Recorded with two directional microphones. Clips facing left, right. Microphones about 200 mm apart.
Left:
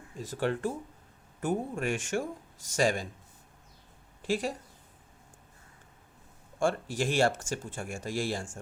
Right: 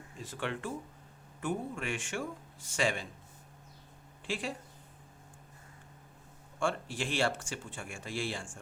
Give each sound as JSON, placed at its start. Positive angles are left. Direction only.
{"t": 0.2, "sound": "speech", "side_deg": 40}
{"t": 4.2, "sound": "speech", "side_deg": 40}
{"t": 6.6, "sound": "speech", "side_deg": 45}